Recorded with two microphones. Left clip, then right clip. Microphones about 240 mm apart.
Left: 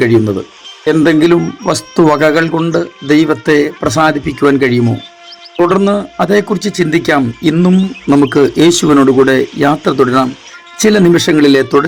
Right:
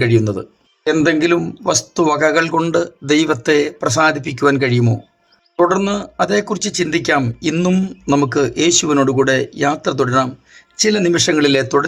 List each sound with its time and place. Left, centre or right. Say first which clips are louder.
0.0 s speech: left 5 dB; centre